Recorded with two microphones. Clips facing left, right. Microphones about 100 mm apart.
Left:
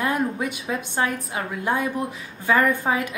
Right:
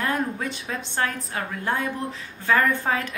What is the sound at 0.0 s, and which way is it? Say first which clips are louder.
A woman's voice: left 2 dB; 15° left (ahead or behind).